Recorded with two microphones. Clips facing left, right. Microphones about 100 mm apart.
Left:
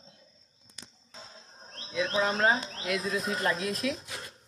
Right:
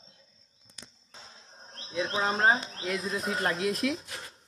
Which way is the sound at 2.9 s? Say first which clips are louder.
Left 2 dB; 35° right (ahead or behind).